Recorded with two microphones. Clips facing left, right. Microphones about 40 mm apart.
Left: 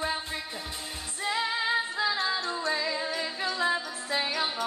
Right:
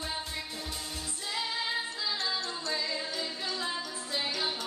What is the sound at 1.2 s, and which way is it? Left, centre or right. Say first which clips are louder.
Music: left 6 dB; left.